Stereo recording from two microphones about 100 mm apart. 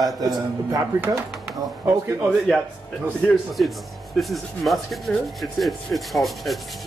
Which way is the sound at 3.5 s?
Centre (ahead or behind).